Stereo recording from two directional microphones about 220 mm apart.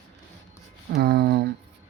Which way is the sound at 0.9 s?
45° right (ahead or behind).